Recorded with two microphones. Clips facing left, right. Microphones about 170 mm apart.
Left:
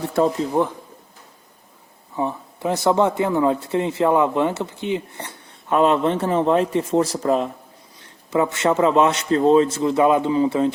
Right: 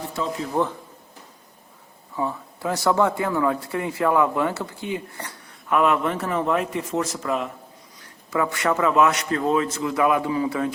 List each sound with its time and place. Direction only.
0.2 s speech: 55° left (ahead or behind)
0.6 s speech: 20° left (ahead or behind)
2.1 s speech: 20° left (ahead or behind)